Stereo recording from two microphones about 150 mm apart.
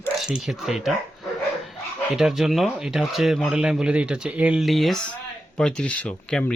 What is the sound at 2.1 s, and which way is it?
Speech, centre (ahead or behind).